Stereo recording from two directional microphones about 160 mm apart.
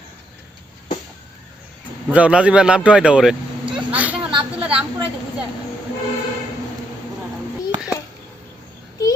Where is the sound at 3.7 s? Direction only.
10° right (ahead or behind).